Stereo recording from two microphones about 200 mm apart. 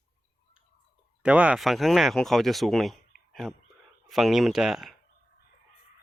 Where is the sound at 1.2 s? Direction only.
5° right (ahead or behind).